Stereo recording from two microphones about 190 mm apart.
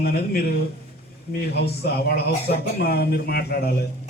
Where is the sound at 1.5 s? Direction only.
55° left (ahead or behind).